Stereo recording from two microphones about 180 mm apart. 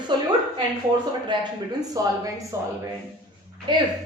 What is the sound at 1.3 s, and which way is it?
A woman's voice, 25° right (ahead or behind).